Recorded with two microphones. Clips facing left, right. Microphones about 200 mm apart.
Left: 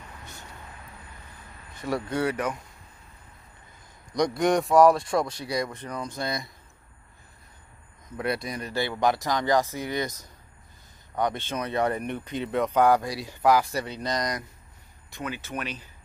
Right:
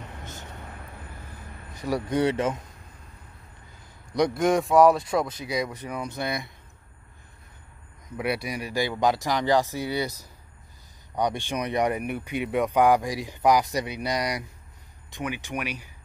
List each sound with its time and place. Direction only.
1.9 s speech: 15° right (ahead or behind)
4.2 s speech: centre (ahead or behind)
8.2 s speech: 10° right (ahead or behind)